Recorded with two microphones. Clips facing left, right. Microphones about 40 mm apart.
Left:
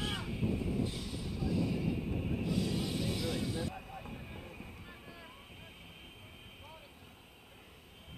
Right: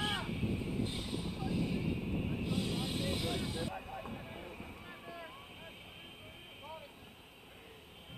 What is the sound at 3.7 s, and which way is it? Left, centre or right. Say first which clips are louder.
Vehicle: right 3 dB; centre.